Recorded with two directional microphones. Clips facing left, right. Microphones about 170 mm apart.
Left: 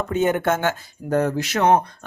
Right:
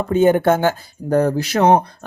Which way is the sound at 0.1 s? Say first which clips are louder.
Right 7 dB; 30° right (ahead or behind).